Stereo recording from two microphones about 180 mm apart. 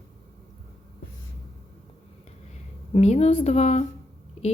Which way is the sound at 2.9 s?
35° left (ahead or behind).